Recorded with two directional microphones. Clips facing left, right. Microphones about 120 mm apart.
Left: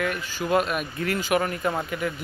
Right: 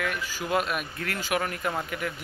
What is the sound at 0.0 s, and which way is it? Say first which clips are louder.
Speech: left 3 dB; 5° right (ahead or behind).